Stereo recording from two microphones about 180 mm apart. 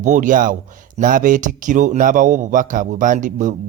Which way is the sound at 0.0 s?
45° right (ahead or behind).